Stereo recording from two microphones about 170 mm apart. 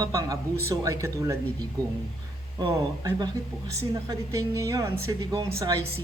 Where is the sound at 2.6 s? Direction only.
25° right (ahead or behind).